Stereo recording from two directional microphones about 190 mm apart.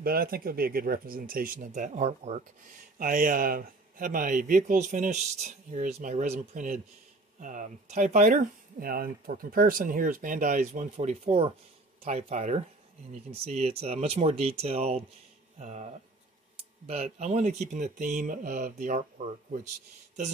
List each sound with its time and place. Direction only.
0.0 s speech: 50° right (ahead or behind)